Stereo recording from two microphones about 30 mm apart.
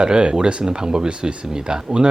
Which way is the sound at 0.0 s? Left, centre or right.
Right.